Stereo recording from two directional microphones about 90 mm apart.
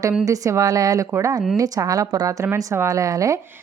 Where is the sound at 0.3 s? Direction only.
40° right (ahead or behind).